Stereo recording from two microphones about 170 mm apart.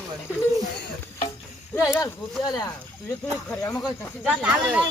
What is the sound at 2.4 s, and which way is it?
Speech, 20° left (ahead or behind).